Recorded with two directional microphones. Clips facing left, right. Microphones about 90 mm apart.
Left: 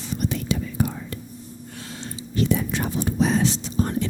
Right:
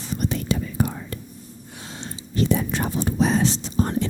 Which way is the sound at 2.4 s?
35° right (ahead or behind).